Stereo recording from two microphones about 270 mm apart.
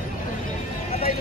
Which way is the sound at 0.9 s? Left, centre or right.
Left.